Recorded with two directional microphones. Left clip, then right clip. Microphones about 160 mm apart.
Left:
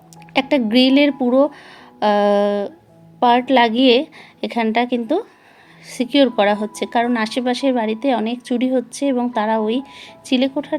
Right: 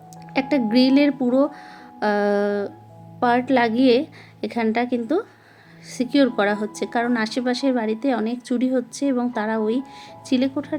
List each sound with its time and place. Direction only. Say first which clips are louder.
0.3 s a woman's voice: left 4 dB; 25° left (ahead or behind)